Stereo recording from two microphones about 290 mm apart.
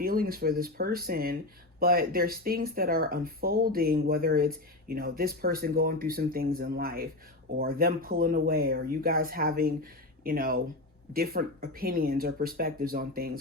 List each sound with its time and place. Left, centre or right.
0.0 s speech: right